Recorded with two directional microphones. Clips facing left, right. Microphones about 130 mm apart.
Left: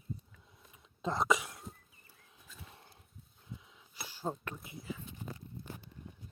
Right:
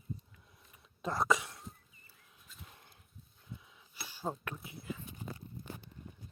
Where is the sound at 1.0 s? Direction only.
20° left (ahead or behind).